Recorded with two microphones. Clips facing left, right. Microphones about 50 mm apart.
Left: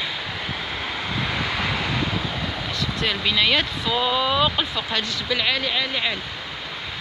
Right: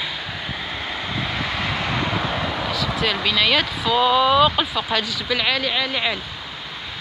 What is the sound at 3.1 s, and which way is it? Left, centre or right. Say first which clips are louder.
Speech: even; centre.